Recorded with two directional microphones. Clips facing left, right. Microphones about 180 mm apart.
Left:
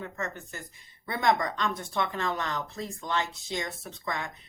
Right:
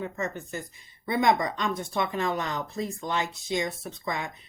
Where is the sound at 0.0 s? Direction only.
15° right (ahead or behind).